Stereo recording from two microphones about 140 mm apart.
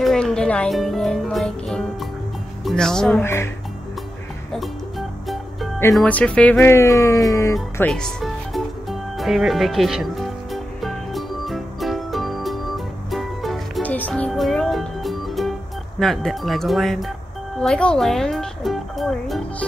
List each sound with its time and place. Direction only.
0.0 s music: 5° left (ahead or behind)
2.6 s speech: 5° left (ahead or behind)
3.2 s speech: 15° left (ahead or behind)
4.5 s music: centre (ahead or behind)
5.9 s speech: 10° left (ahead or behind)
7.9 s music: 5° left (ahead or behind)
13.8 s music: 10° left (ahead or behind)
16.0 s speech: centre (ahead or behind)